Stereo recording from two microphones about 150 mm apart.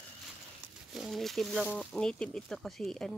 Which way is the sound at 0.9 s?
Centre (ahead or behind).